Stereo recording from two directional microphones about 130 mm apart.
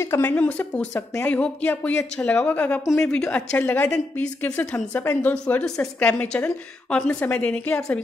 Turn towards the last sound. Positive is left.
turn(degrees=10)  # may be behind; listen again after turning